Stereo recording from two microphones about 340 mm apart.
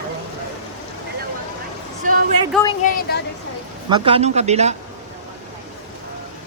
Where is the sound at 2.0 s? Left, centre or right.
Right.